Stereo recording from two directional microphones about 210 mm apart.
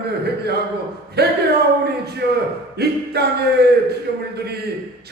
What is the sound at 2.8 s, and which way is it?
Speech, 50° right (ahead or behind).